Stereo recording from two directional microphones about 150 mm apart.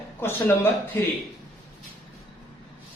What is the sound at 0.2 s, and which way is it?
Speech, 15° left (ahead or behind).